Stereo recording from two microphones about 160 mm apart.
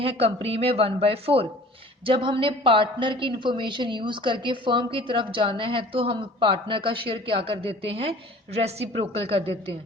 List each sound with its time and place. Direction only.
0.0 s a woman's voice: 35° right (ahead or behind)